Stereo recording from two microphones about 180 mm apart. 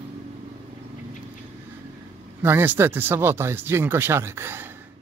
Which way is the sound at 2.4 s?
10° right (ahead or behind).